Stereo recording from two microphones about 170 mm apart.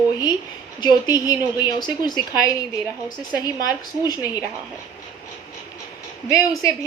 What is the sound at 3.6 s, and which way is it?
Speech, 20° left (ahead or behind).